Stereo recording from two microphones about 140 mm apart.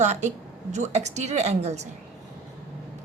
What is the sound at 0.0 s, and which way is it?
A woman's voice, 55° right (ahead or behind).